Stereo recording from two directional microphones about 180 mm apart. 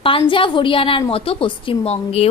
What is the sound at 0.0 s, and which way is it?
A woman's voice, 30° left (ahead or behind).